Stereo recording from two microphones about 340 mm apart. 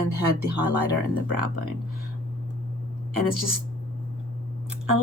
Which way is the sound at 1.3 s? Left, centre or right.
Right.